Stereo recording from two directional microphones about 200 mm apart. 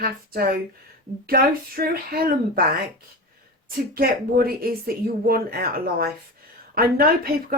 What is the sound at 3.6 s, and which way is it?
Speech, 50° right (ahead or behind).